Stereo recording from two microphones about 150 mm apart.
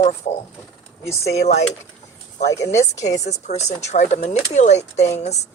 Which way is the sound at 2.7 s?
50° left (ahead or behind).